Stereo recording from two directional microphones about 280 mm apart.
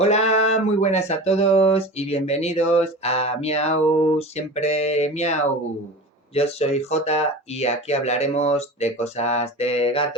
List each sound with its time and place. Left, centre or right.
0.0 s speech: left
6.3 s speech: left